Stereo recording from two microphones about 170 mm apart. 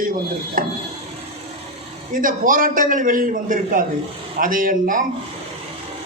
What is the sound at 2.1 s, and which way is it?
A man's voice, 55° right (ahead or behind).